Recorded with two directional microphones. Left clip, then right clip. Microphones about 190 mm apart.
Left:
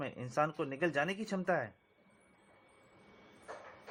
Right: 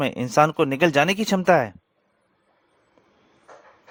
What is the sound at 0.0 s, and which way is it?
Speech, 60° right (ahead or behind).